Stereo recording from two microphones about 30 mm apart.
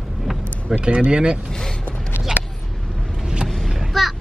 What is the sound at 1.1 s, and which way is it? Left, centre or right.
Speech, right.